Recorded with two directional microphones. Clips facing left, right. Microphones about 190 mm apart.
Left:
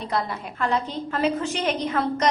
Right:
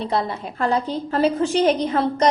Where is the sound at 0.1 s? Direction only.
30° right (ahead or behind).